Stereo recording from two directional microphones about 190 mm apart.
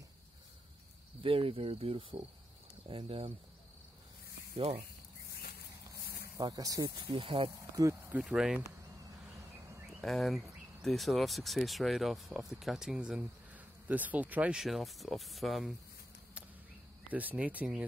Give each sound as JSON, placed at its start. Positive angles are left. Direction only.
{"t": 1.2, "sound": "speech", "side_deg": -30}
{"t": 4.6, "sound": "speech", "side_deg": -30}
{"t": 6.3, "sound": "speech", "side_deg": -20}
{"t": 8.2, "sound": "speech", "side_deg": -5}
{"t": 10.0, "sound": "speech", "side_deg": 0}
{"t": 17.1, "sound": "speech", "side_deg": -10}